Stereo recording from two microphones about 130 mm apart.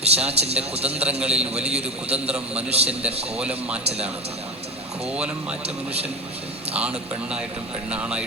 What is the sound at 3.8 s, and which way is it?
Speech, 50° right (ahead or behind).